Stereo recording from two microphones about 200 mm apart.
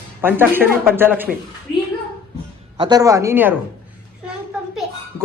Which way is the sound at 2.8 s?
20° right (ahead or behind).